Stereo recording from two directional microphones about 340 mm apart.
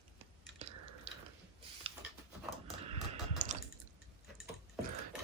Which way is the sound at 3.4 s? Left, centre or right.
Right.